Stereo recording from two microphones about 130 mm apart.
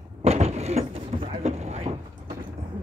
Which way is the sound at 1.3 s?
55° right (ahead or behind).